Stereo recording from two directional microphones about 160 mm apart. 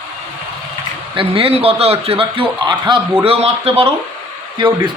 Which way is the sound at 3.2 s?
40° right (ahead or behind).